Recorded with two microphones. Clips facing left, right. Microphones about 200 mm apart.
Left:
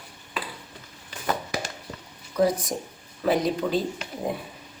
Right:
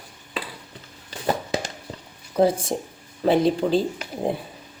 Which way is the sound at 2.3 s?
30° right (ahead or behind).